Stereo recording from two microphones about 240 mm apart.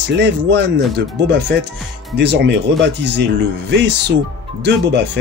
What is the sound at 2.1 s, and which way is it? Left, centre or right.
Speech, right.